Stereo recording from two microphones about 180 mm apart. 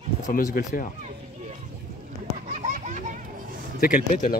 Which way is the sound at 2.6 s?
45° right (ahead or behind).